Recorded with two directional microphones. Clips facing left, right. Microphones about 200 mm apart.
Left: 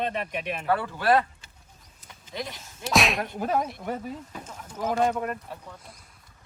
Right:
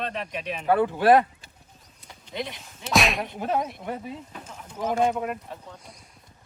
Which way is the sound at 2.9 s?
Centre (ahead or behind).